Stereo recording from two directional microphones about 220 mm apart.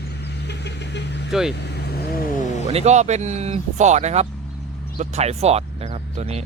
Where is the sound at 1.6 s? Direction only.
50° left (ahead or behind).